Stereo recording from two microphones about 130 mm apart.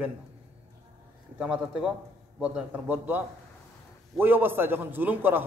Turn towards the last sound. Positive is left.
turn(degrees=-15)  # may be behind; listen again after turning